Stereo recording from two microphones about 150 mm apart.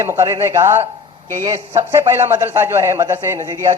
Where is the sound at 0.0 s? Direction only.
20° right (ahead or behind).